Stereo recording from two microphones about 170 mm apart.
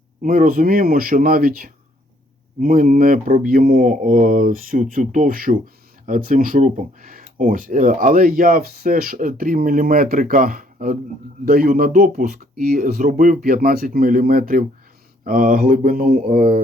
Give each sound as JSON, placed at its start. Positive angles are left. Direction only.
{"t": 0.2, "sound": "speech", "side_deg": -55}